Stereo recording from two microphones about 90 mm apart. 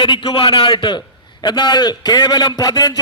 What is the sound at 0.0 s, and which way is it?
A man's voice, 55° left (ahead or behind).